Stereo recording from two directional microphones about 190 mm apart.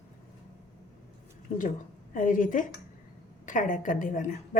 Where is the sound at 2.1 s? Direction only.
45° left (ahead or behind).